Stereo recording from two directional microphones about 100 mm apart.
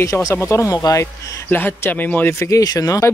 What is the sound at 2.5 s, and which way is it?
Speech, 35° left (ahead or behind).